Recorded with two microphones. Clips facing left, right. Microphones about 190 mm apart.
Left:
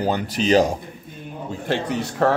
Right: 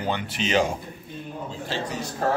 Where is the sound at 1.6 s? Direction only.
60° left (ahead or behind).